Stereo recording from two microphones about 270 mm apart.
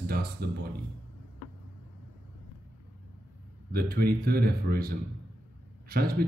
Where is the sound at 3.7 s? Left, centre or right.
Right.